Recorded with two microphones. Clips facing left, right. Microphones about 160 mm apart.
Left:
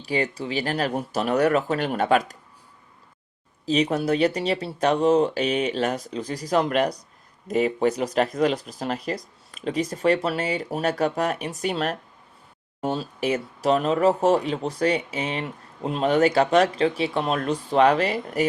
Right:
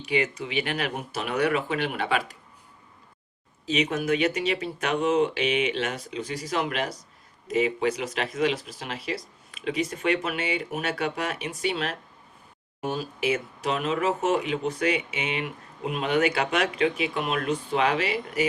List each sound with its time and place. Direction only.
0.0 s speech: 35° left (ahead or behind)
3.7 s speech: 35° left (ahead or behind)
12.8 s speech: 30° left (ahead or behind)